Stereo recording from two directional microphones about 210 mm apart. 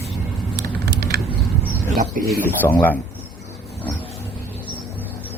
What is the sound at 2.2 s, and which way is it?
Speech, 40° right (ahead or behind).